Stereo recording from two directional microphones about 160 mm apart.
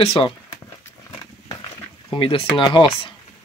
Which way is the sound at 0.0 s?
35° left (ahead or behind).